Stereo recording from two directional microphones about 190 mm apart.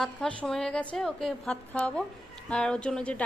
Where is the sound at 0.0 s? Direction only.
5° left (ahead or behind).